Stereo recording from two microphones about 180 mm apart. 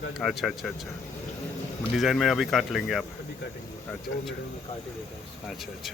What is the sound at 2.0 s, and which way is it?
Speech, centre (ahead or behind).